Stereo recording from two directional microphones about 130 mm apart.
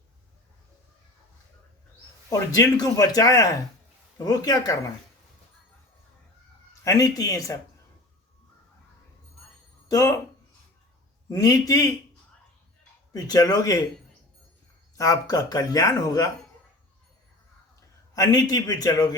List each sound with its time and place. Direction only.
2.3 s speech: 30° left (ahead or behind)
6.8 s speech: 25° left (ahead or behind)
11.3 s speech: 25° left (ahead or behind)
13.1 s speech: 30° left (ahead or behind)
14.9 s speech: 25° left (ahead or behind)
18.1 s speech: 30° left (ahead or behind)